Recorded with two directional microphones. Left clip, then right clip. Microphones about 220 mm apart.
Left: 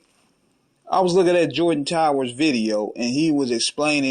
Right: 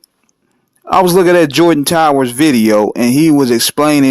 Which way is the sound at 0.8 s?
45° right (ahead or behind).